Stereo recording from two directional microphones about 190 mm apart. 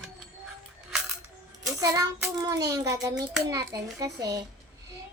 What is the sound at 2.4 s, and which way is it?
A woman's voice, 20° right (ahead or behind).